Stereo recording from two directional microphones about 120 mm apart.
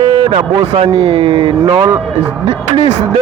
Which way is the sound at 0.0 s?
50° right (ahead or behind).